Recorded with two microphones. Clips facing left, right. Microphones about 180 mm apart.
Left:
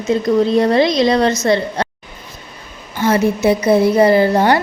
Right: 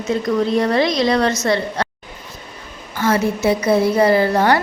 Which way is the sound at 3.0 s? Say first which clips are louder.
Left 3 dB; 20° left (ahead or behind).